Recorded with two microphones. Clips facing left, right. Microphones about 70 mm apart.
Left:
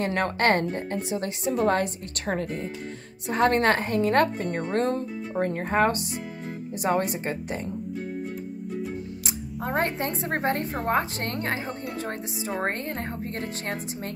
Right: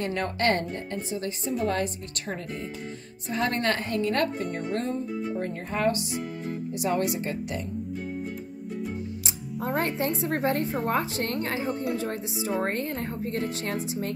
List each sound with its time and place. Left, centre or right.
0.0 s speech: left
0.9 s a woman's voice: left
5.4 s speech: left
9.2 s speech: left